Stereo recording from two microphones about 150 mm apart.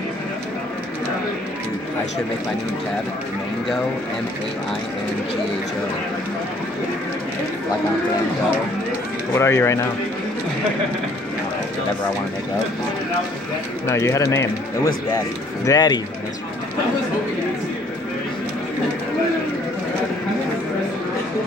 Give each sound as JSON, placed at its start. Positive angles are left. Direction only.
{"t": 9.3, "sound": "speech", "side_deg": 20}
{"t": 13.8, "sound": "speech", "side_deg": 20}
{"t": 15.6, "sound": "speech", "side_deg": 25}